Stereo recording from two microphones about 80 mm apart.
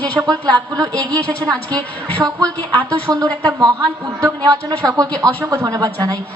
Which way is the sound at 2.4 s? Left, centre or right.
Centre.